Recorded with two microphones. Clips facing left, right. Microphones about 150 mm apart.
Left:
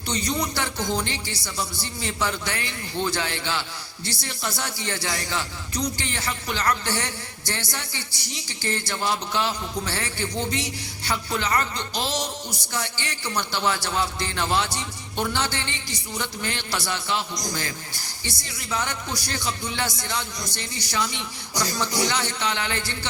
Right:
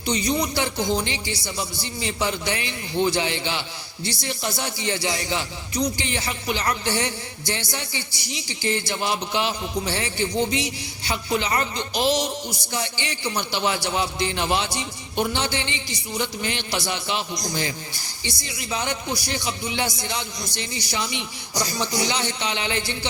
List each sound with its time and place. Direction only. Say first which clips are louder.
0.0 s a man's voice: right 3 dB; 15° right (ahead or behind)